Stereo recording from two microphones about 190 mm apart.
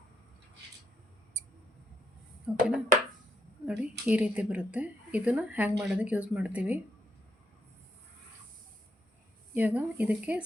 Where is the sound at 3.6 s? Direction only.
5° right (ahead or behind).